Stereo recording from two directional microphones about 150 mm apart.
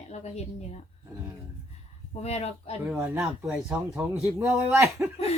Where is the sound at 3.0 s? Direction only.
20° right (ahead or behind).